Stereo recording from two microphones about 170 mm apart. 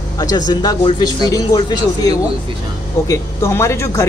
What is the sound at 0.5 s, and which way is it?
Speech, 25° left (ahead or behind).